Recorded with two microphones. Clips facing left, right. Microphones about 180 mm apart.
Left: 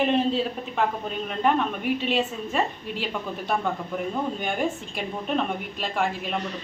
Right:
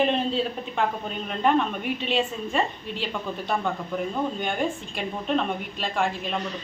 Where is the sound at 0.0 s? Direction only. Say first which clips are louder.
Left 1 dB; 5° left (ahead or behind).